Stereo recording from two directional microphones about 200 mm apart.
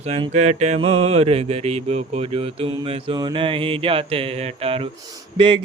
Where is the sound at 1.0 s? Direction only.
30° right (ahead or behind).